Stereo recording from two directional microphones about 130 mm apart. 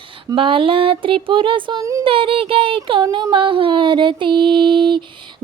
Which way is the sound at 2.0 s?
45° right (ahead or behind).